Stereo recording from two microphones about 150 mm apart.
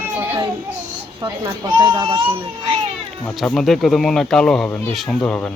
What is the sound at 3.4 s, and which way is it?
Speech, centre (ahead or behind).